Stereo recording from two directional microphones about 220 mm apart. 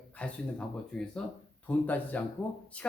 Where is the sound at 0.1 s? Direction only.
5° left (ahead or behind).